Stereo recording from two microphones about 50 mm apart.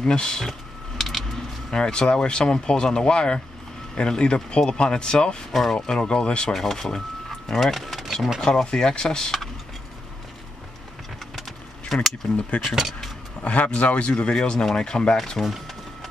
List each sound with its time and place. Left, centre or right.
0.0 s speech: centre
0.5 s a sound: centre
1.7 s speech: centre
5.5 s speech: centre
6.5 s speech: centre
8.6 s speech: centre
11.9 s speech: centre
13.4 s speech: left; by 15.5 s centre